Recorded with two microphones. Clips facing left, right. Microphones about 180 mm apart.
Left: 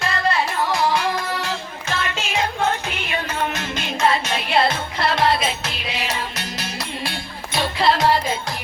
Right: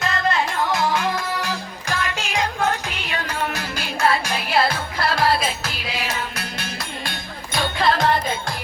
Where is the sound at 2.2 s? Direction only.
15° right (ahead or behind).